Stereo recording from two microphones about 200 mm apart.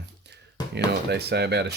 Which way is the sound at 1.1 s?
55° right (ahead or behind).